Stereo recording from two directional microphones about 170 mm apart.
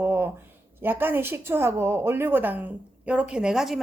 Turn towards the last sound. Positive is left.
turn(degrees=0)  # may be behind; listen again after turning